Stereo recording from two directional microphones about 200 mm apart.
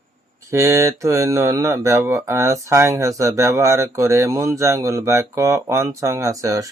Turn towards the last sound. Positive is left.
turn(degrees=-15)  # may be behind; listen again after turning